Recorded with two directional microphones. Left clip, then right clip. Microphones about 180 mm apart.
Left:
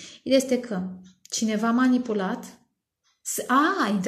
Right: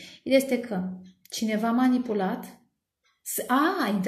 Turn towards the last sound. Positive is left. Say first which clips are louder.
# left 3 dB
turn(degrees=35)  # may be behind; listen again after turning